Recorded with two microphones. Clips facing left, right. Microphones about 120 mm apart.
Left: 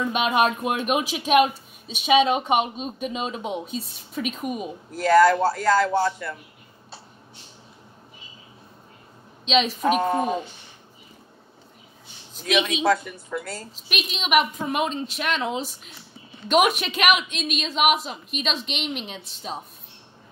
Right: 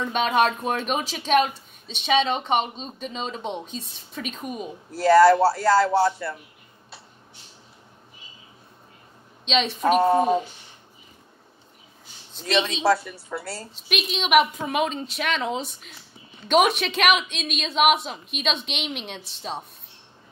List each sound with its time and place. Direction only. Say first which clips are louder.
0.0 s speech: even; 10° left (ahead or behind)
4.9 s speech: right 2 dB; 30° right (ahead or behind)
9.5 s a woman's voice: even; centre (ahead or behind)
10.0 s speech: right 4 dB; 30° right (ahead or behind)
12.5 s speech: right 1 dB; 30° right (ahead or behind)
13.7 s a woman's voice: right 4 dB; centre (ahead or behind)